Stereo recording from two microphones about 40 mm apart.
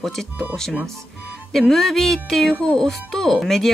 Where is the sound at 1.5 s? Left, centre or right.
Centre.